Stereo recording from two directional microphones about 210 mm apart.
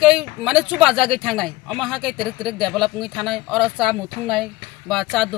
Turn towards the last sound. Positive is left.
turn(degrees=0)  # may be behind; listen again after turning